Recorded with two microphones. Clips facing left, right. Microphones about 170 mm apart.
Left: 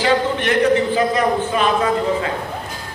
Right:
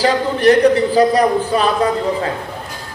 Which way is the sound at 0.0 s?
35° right (ahead or behind).